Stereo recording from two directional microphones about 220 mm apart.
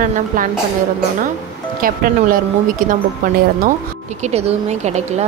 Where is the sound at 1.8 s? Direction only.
40° right (ahead or behind).